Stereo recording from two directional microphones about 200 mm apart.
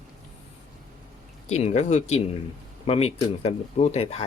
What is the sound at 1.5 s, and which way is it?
Speech, 35° left (ahead or behind).